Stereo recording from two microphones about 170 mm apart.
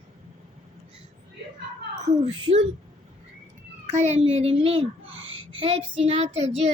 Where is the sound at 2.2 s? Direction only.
35° right (ahead or behind).